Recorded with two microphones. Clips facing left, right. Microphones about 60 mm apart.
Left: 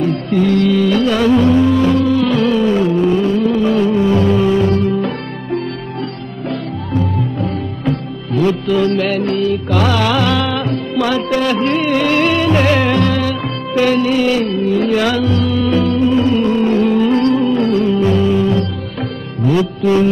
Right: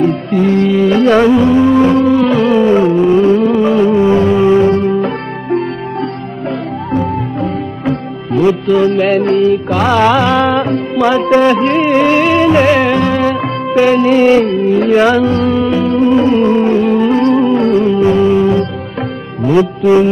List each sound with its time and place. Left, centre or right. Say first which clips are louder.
0.3 s music: left 1 dB; right
1.4 s music: right 3 dB; centre
7.9 s music: right 5 dB; centre
9.1 s music: right 6 dB; right
14.0 s music: right 6 dB; right
15.7 s music: right 2 dB; centre
16.2 s music: right 4 dB; right
16.7 s music: right 2 dB; centre
17.2 s music: right 3 dB; right